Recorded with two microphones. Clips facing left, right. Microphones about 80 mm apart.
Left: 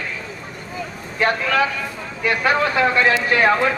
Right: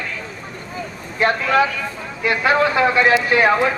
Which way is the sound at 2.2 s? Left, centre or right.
Centre.